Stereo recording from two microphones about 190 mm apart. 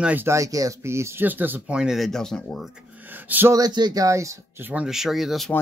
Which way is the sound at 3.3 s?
10° right (ahead or behind).